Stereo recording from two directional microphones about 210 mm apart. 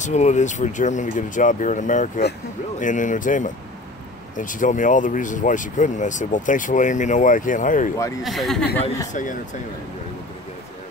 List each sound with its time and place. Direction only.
0.0 s speech: 35° left (ahead or behind)
8.2 s speech: centre (ahead or behind)
9.1 s speech: 35° left (ahead or behind)